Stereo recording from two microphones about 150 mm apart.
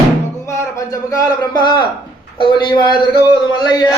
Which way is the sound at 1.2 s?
30° left (ahead or behind).